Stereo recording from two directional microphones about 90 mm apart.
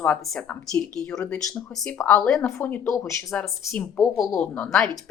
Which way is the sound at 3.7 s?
10° left (ahead or behind).